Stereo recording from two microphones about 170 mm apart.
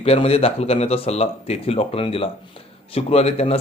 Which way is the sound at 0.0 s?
35° left (ahead or behind).